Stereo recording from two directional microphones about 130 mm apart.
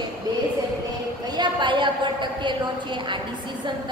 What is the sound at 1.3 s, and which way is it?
A woman's voice, 35° right (ahead or behind).